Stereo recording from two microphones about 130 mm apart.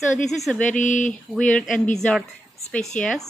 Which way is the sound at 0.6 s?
75° left (ahead or behind).